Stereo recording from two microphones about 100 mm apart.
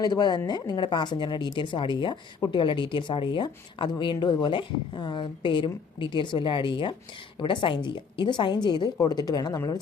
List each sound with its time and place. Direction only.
0.0 s a woman's voice: 45° left (ahead or behind)